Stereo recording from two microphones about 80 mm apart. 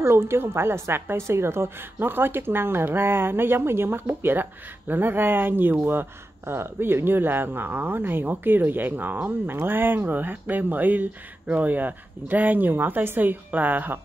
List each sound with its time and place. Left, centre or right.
0.0 s speech: right